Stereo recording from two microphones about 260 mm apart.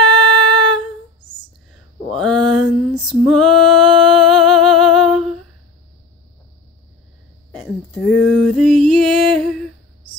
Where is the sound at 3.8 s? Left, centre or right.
Centre.